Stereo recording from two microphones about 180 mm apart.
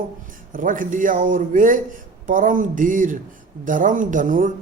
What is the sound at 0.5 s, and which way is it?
Speech, 50° right (ahead or behind).